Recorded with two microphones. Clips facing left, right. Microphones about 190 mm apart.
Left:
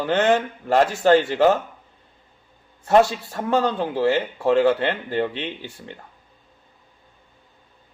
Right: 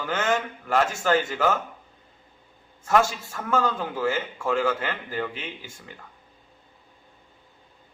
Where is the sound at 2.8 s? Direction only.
35° left (ahead or behind).